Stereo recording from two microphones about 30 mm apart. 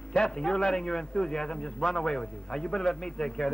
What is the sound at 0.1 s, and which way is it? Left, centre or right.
A man's voice, left.